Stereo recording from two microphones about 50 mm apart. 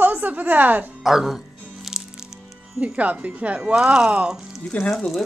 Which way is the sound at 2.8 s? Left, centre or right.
Right.